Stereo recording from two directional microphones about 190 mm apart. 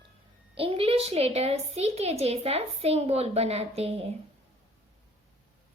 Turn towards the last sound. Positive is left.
turn(degrees=-30)  # may be behind; listen again after turning